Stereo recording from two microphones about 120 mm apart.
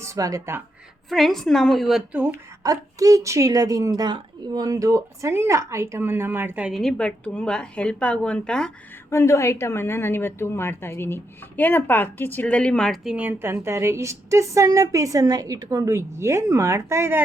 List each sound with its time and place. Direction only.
0.0 s speech: 25° right (ahead or behind)
1.1 s a woman's voice: centre (ahead or behind)
2.1 s speech: 15° right (ahead or behind)
2.6 s a woman's voice: 30° right (ahead or behind)
6.7 s speech: centre (ahead or behind)
9.0 s a woman's voice: 25° left (ahead or behind); by 13.1 s centre (ahead or behind)
13.1 s a woman's voice: 15° right (ahead or behind)